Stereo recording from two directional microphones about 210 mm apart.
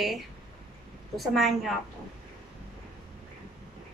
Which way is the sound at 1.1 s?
Centre (ahead or behind).